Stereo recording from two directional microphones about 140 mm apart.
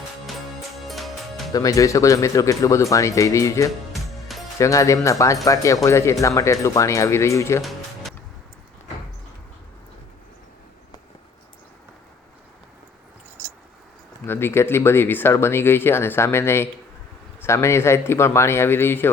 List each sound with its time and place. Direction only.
0.9 s music: centre (ahead or behind)
1.5 s speech: 25° left (ahead or behind)
3.9 s music: centre (ahead or behind)
4.5 s speech: 20° left (ahead or behind)
14.3 s speech: 15° left (ahead or behind)